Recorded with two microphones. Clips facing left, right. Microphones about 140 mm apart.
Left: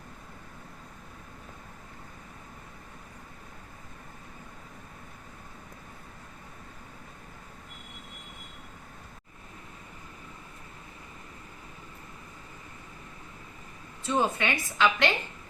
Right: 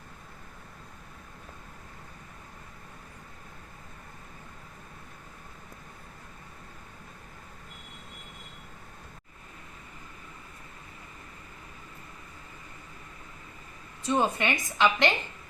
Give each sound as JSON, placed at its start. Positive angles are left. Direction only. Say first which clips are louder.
{"t": 14.0, "sound": "a woman's voice", "louder": "right 1 dB", "side_deg": -15}